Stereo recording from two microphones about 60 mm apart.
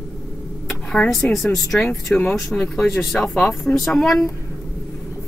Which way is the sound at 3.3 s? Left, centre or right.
Centre.